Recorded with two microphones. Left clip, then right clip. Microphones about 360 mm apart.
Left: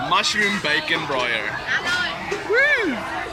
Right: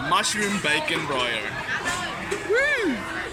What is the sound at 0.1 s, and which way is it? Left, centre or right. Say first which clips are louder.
Speech: left 3 dB; centre.